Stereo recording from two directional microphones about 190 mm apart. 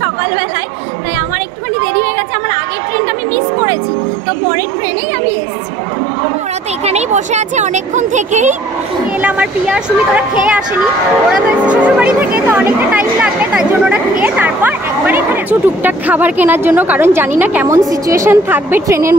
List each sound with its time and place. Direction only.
6.8 s speech: 35° right (ahead or behind)
9.2 s speech: 5° right (ahead or behind)
11.3 s speech: 5° right (ahead or behind)